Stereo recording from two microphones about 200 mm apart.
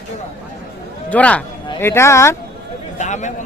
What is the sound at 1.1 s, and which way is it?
Speech, 5° left (ahead or behind).